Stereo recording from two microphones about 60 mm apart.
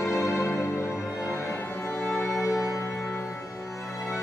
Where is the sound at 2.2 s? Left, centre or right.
Left.